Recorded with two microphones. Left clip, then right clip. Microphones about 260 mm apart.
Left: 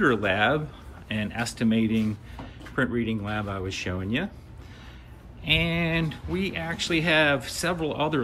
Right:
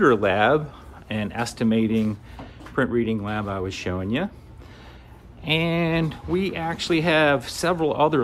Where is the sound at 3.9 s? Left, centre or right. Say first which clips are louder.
Right 4 dB; right.